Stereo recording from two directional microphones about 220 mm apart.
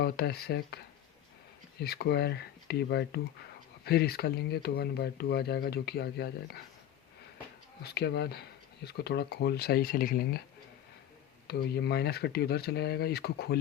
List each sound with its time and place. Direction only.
0.0 s speech: 45° left (ahead or behind)
1.8 s speech: 45° left (ahead or behind)
7.8 s speech: 50° left (ahead or behind)
11.4 s speech: 45° left (ahead or behind)